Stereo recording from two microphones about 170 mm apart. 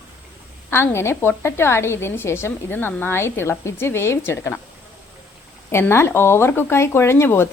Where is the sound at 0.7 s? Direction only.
15° left (ahead or behind).